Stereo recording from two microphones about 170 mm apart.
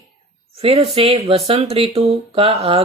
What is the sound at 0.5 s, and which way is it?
Speech, 35° right (ahead or behind).